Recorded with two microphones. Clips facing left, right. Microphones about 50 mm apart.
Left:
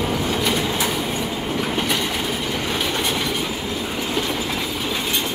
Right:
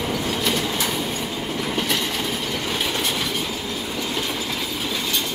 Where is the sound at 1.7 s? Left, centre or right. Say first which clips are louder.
Left 2 dB; centre; by 4.2 s left.